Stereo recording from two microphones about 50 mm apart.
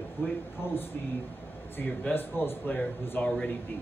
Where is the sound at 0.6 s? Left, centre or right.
Left.